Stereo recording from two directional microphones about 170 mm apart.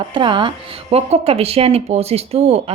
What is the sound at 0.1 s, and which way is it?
Speech, 30° right (ahead or behind).